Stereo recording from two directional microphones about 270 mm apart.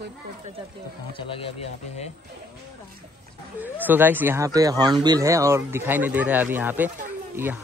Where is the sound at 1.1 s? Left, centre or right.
Centre.